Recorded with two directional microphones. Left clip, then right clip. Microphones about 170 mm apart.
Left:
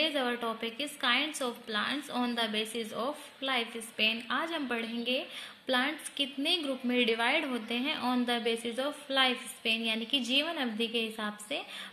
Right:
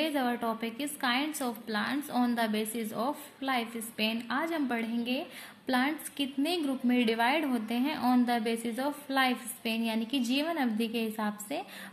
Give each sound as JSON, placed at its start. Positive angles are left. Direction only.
{"t": 0.0, "sound": "a woman's voice", "side_deg": 10}